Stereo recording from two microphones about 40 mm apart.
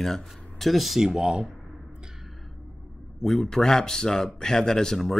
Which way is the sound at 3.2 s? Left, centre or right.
Centre.